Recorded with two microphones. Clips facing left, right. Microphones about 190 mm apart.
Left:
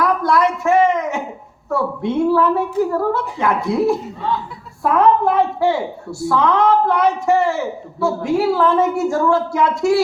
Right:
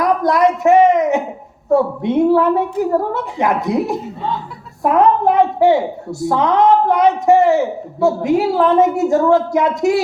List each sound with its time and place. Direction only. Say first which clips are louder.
0.0 s a woman's voice: right 3 dB; 20° right (ahead or behind)